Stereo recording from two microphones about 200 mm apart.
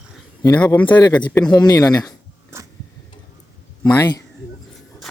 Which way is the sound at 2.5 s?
15° right (ahead or behind).